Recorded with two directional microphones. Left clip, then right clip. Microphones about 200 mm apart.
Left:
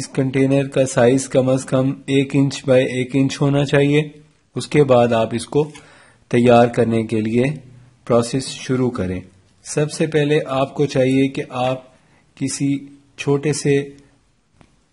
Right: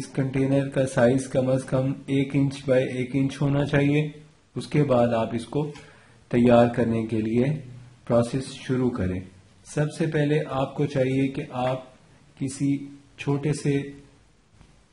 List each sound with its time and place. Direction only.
0.1 s speech: 45° left (ahead or behind)
8.6 s speech: 45° left (ahead or behind)